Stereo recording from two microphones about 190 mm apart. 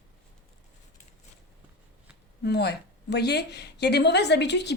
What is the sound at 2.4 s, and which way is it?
A woman's voice, 60° left (ahead or behind).